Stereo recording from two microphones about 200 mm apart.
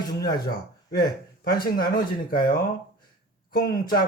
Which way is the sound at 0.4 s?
50° left (ahead or behind).